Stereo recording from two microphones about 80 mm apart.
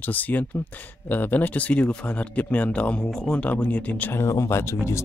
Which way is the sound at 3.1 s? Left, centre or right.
Centre.